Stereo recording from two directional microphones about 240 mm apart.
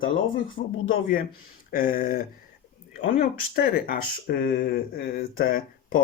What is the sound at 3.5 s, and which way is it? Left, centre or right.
Speech, left.